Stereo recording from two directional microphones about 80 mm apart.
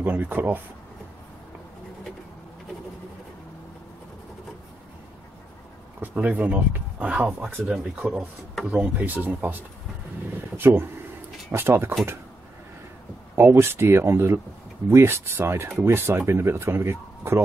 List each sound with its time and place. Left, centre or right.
0.0 s speech: right
5.9 s speech: centre
10.6 s speech: right
13.4 s speech: right